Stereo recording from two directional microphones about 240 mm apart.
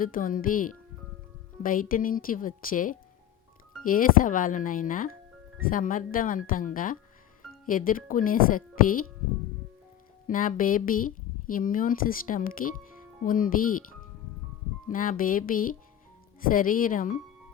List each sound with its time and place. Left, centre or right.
0.0 s a woman's voice: left
10.2 s a woman's voice: left
14.8 s a woman's voice: left